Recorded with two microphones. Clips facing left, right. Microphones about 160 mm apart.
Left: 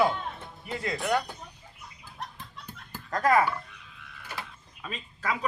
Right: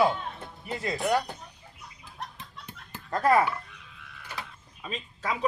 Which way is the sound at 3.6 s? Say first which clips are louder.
Even; centre (ahead or behind).